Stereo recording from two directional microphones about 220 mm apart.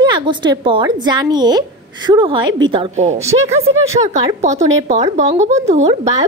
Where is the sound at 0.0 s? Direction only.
20° right (ahead or behind).